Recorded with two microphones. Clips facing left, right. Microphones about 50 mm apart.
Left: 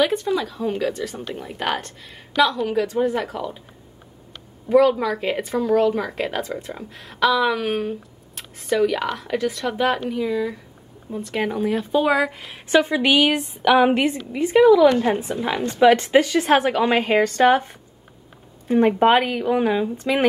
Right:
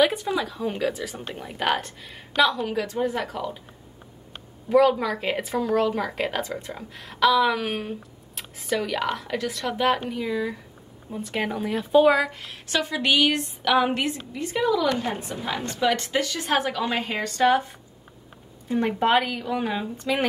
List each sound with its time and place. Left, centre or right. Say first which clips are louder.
0.0 s speech: left 2 dB; centre
4.6 s speech: left 3 dB; centre; by 16.4 s left
16.4 s a woman's voice: left 7 dB; left
18.7 s speech: left 6 dB; left
19.7 s speech: left 5 dB; centre